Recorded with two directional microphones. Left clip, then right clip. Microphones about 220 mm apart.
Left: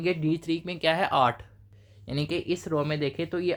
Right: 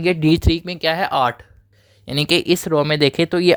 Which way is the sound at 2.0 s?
45° right (ahead or behind).